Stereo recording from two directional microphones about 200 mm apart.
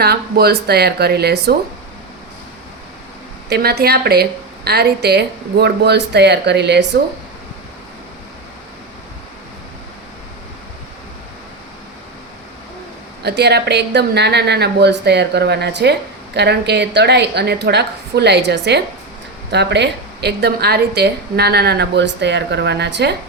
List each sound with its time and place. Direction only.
0.0 s speech: 50° right (ahead or behind)
3.5 s a woman's voice: 50° right (ahead or behind)
13.2 s a woman's voice: 55° right (ahead or behind)